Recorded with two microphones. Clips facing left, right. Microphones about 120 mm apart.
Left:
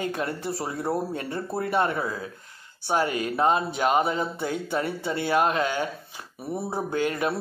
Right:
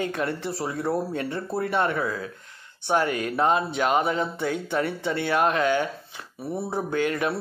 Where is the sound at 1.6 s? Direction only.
35° left (ahead or behind).